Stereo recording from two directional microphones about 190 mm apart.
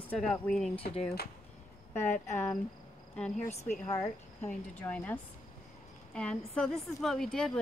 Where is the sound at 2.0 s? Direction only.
40° left (ahead or behind).